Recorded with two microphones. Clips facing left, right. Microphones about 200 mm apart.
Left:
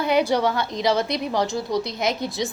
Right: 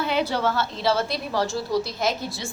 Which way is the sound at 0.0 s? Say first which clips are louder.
Left 4 dB; 15° left (ahead or behind).